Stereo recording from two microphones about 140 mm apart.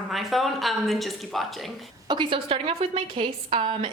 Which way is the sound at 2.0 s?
35° right (ahead or behind).